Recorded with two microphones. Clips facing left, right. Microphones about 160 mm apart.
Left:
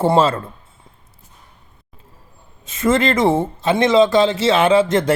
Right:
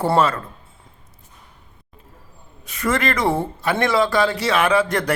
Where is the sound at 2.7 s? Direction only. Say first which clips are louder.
Left 5 dB; 25° left (ahead or behind).